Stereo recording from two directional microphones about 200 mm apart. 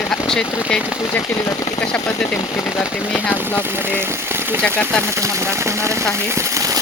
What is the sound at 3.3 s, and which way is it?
Speech, 10° right (ahead or behind).